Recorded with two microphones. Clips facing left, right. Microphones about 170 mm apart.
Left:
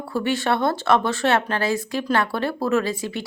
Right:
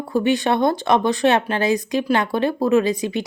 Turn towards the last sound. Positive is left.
turn(degrees=-20)  # may be behind; listen again after turning